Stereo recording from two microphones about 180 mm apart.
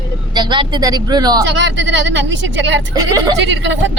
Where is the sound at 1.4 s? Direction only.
90° right.